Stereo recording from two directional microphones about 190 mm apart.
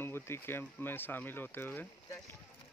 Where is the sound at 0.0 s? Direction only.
10° left (ahead or behind).